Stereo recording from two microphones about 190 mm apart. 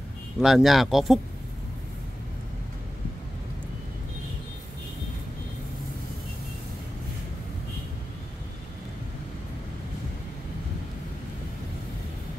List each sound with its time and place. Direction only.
0.4 s speech: centre (ahead or behind)